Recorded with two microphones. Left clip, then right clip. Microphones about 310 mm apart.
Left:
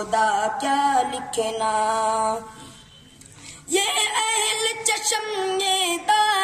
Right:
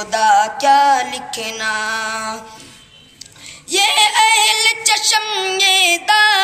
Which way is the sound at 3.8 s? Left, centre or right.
Left.